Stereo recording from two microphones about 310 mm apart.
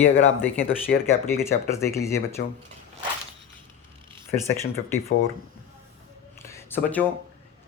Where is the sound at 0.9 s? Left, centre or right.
Left.